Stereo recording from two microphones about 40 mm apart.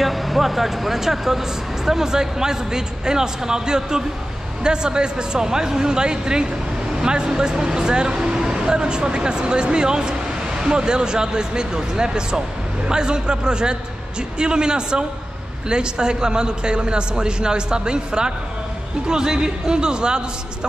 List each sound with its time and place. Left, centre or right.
0.0 s speech: centre; by 20.2 s right